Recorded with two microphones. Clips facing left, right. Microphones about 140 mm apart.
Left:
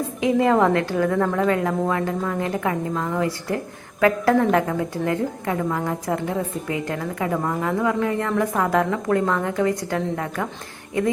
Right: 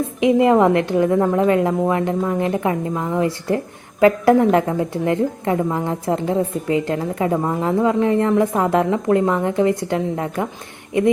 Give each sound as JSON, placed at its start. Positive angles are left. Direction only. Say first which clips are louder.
{"t": 0.2, "sound": "a woman's voice", "louder": "right 4 dB", "side_deg": -20}